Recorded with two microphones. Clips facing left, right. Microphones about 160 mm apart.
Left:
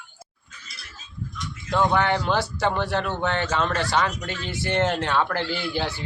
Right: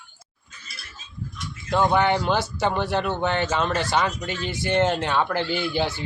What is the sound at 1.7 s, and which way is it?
A man's voice, 5° right (ahead or behind).